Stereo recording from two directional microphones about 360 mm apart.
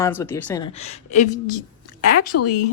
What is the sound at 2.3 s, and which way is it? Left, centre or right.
Speech, left.